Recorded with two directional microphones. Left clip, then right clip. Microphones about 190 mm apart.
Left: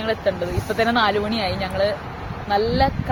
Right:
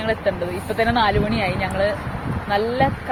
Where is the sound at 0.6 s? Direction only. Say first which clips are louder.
Even; 25° left (ahead or behind).